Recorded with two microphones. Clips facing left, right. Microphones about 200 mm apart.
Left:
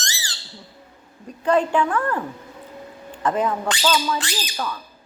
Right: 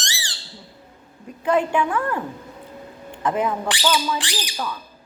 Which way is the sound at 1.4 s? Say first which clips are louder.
Left 1 dB; 10° right (ahead or behind).